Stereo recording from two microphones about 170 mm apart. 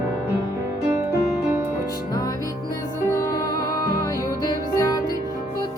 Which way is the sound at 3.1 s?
20° left (ahead or behind).